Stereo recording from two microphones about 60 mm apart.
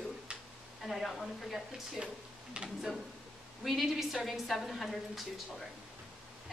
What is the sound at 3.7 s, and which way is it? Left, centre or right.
A woman's voice, centre.